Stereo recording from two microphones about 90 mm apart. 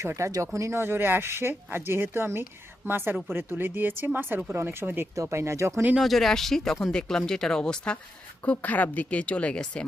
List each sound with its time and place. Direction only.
0.0 s speech: 35° right (ahead or behind)
6.0 s a woman's voice: centre (ahead or behind)